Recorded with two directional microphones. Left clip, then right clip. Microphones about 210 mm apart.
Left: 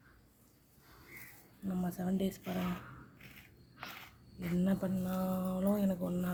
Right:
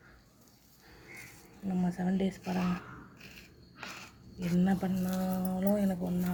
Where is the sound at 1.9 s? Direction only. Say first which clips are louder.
Right 3 dB; 15° left (ahead or behind).